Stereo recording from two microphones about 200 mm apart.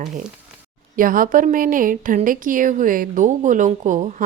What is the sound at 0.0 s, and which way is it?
A woman's voice, 40° right (ahead or behind).